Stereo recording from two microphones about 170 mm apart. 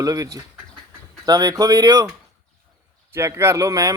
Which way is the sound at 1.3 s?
20° right (ahead or behind).